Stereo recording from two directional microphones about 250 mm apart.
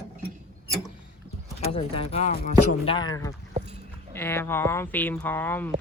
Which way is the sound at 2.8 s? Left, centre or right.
Centre.